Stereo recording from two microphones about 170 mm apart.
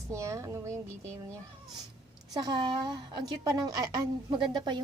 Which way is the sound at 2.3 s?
25° right (ahead or behind).